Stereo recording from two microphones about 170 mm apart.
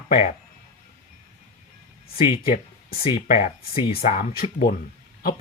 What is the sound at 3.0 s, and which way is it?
Speech, 40° left (ahead or behind).